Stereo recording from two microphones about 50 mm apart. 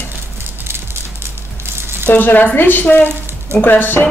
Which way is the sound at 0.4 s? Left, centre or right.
Right.